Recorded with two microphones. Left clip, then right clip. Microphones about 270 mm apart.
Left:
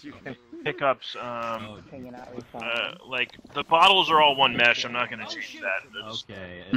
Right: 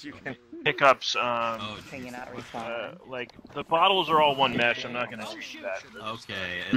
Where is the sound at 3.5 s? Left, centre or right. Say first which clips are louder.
Left 4 dB; left.